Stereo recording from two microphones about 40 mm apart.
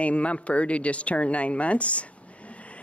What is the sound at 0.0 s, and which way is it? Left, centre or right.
Speech, left.